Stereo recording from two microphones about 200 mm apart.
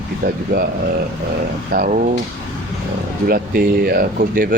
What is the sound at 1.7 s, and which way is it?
Speech, 45° right (ahead or behind).